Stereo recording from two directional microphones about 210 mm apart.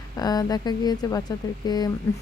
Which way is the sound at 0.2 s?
20° left (ahead or behind).